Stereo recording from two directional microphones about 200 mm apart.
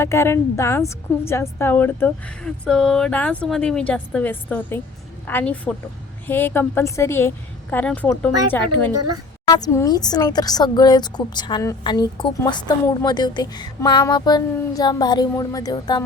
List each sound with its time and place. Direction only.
0.0 s a woman's voice: 15° left (ahead or behind)